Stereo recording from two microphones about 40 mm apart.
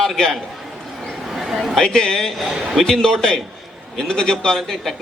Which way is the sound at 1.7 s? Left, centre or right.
Centre.